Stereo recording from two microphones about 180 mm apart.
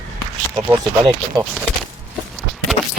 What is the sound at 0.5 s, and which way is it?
Speech, 10° right (ahead or behind).